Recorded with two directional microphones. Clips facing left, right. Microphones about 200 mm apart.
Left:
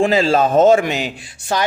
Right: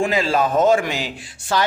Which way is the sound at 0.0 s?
30° left (ahead or behind).